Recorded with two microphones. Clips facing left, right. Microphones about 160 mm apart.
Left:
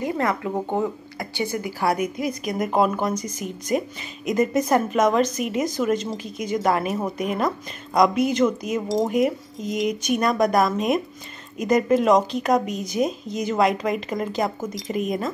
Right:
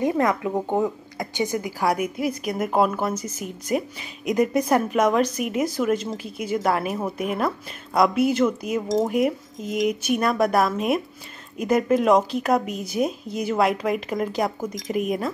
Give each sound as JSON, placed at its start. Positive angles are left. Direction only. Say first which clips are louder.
{"t": 0.0, "sound": "speech", "louder": "right 3 dB", "side_deg": -15}